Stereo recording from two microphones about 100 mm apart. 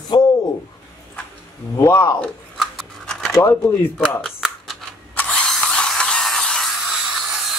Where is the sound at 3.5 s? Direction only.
20° left (ahead or behind).